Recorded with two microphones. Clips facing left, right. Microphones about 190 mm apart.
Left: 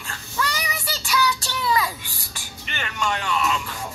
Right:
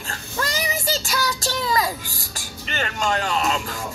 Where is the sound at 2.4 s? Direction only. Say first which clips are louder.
Right 6 dB; 40° right (ahead or behind).